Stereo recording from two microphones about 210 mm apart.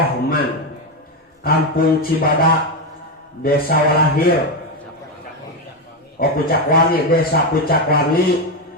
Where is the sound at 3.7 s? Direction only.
45° left (ahead or behind).